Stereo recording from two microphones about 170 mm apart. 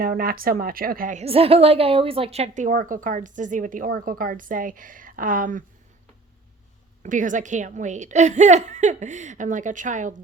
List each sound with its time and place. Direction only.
0.0 s a woman's voice: 60° right (ahead or behind)
1.2 s a woman's voice: 35° right (ahead or behind)
2.6 s a woman's voice: 50° right (ahead or behind)
7.0 s a woman's voice: 50° right (ahead or behind)